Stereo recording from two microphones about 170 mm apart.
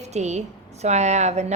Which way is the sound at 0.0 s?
40° right (ahead or behind).